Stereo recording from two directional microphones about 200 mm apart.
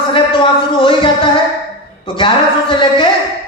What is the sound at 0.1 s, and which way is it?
Music, 25° left (ahead or behind).